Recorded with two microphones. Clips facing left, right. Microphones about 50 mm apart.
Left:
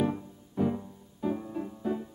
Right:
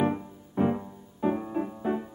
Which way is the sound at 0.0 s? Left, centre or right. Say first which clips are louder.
Right 3 dB; right.